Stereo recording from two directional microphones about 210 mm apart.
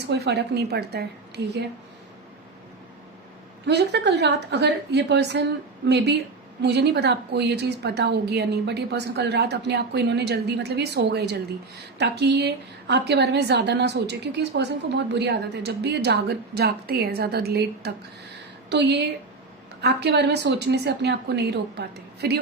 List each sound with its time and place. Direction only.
0.0 s a woman's voice: 55° right (ahead or behind)
3.7 s a woman's voice: 55° right (ahead or behind)
6.6 s a woman's voice: 50° right (ahead or behind)